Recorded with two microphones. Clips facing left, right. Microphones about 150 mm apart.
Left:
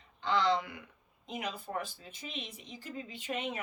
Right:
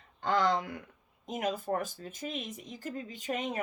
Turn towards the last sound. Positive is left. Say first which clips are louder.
# right 3 dB
turn(degrees=-40)  # may be behind; listen again after turning